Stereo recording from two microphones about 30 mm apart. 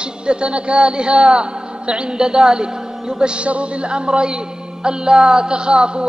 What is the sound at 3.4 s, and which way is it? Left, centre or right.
A man's voice, right.